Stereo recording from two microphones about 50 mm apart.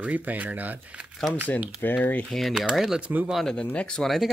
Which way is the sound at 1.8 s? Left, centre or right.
Left.